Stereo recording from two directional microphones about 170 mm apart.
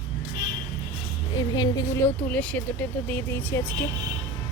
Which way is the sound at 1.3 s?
25° left (ahead or behind).